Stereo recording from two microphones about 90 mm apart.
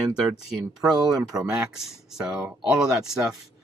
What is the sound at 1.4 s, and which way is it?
Speech, 10° right (ahead or behind).